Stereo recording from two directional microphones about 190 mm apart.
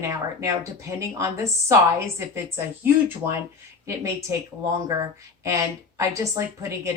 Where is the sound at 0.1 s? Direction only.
15° right (ahead or behind).